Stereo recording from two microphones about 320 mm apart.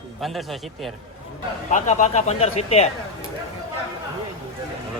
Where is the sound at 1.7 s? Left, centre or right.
Left.